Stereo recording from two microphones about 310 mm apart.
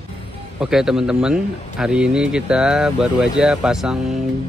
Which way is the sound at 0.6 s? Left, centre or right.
Centre.